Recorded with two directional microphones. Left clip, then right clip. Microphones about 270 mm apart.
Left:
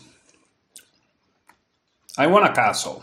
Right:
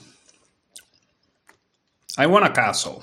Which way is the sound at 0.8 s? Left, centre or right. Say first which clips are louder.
Right 3 dB; right.